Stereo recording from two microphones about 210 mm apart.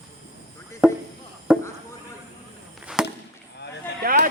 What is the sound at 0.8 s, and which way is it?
Speech, 5° right (ahead or behind).